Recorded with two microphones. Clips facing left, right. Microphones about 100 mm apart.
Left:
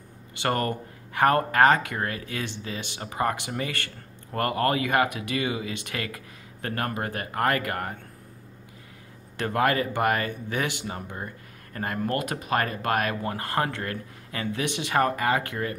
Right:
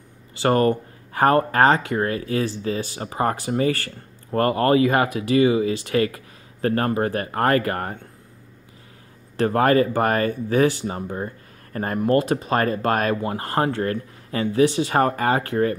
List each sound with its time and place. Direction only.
0.4 s speech: 30° right (ahead or behind)
9.4 s speech: 35° right (ahead or behind)